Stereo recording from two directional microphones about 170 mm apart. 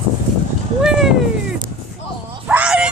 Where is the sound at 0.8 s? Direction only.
5° right (ahead or behind).